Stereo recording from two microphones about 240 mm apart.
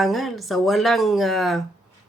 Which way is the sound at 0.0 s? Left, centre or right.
Centre.